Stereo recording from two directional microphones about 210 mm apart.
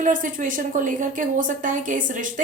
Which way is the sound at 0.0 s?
40° right (ahead or behind).